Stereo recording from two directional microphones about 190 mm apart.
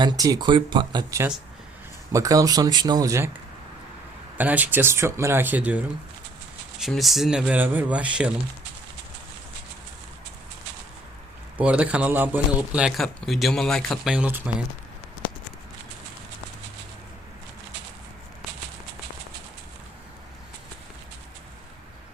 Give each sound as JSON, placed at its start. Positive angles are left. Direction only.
{"t": 0.0, "sound": "speech", "side_deg": -20}
{"t": 4.4, "sound": "a man's voice", "side_deg": -10}
{"t": 11.5, "sound": "a man's voice", "side_deg": -5}